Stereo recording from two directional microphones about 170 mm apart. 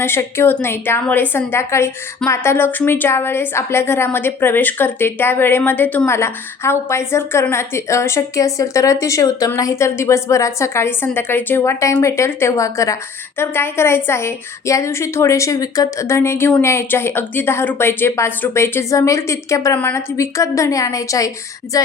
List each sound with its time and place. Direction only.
0.0 s a woman's voice: 15° left (ahead or behind)
21.7 s music: 20° left (ahead or behind)